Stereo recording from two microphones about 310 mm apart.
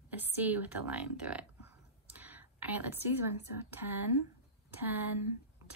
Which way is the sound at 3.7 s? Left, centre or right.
Centre.